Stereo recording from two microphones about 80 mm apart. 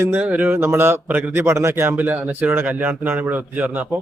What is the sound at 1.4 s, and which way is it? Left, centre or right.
A man's voice, right.